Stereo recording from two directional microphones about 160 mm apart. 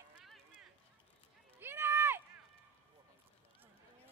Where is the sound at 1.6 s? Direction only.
15° right (ahead or behind).